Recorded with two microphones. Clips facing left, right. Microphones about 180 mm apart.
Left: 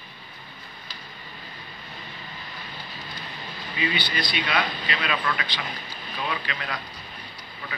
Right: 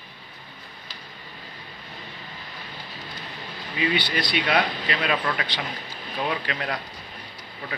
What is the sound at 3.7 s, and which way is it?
Speech, 60° right (ahead or behind).